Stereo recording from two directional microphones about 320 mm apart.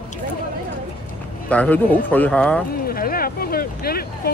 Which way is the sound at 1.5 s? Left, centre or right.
Centre.